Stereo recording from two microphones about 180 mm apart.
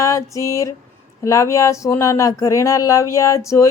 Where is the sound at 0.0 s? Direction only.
15° left (ahead or behind).